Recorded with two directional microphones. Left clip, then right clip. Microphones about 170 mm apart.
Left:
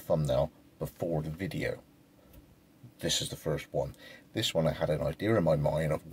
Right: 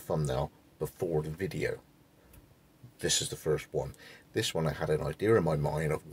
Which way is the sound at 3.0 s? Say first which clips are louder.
Right 1 dB; 15° right (ahead or behind).